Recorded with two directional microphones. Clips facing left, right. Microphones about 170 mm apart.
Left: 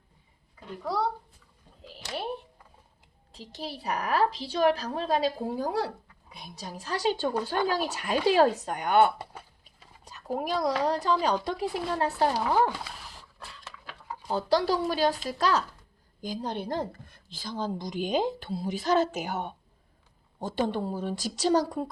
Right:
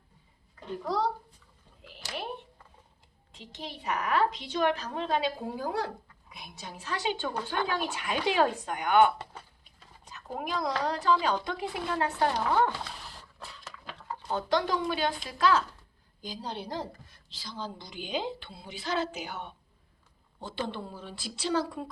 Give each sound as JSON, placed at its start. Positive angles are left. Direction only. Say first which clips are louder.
{"t": 3.3, "sound": "a woman's voice", "louder": "left 4 dB", "side_deg": 35}
{"t": 10.3, "sound": "a woman's voice", "louder": "left 4 dB", "side_deg": 40}
{"t": 12.3, "sound": "a sound", "louder": "left 1 dB", "side_deg": 10}
{"t": 14.3, "sound": "a woman's voice", "louder": "left 3 dB", "side_deg": 35}